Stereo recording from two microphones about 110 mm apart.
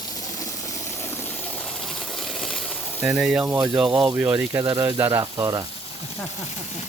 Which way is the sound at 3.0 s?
10° right (ahead or behind).